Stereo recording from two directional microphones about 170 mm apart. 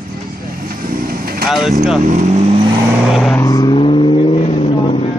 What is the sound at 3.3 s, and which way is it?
Vehicle, 20° left (ahead or behind).